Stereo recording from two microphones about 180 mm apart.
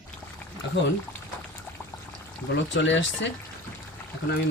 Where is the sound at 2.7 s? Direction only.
90° left.